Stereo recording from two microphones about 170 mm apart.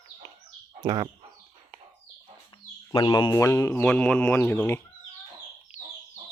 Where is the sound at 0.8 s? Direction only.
25° right (ahead or behind).